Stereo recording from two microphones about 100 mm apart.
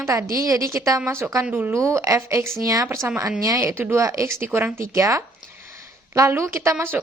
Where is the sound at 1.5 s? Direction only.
20° right (ahead or behind); by 3.6 s 35° right (ahead or behind).